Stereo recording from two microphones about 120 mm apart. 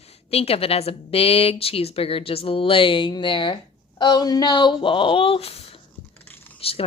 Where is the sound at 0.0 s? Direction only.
55° left (ahead or behind).